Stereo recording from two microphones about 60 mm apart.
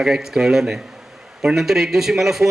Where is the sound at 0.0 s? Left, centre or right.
Centre.